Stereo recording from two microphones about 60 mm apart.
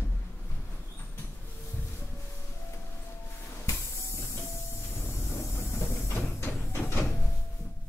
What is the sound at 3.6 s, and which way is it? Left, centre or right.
Train, left.